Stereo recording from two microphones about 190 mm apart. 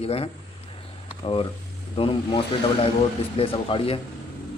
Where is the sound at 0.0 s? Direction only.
30° left (ahead or behind).